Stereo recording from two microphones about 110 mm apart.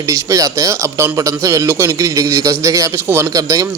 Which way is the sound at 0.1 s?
30° right (ahead or behind).